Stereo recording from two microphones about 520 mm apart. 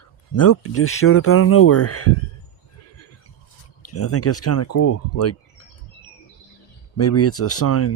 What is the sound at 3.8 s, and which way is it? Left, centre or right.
Speech, left.